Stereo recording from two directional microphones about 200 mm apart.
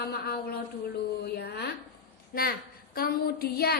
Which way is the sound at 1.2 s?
55° left (ahead or behind).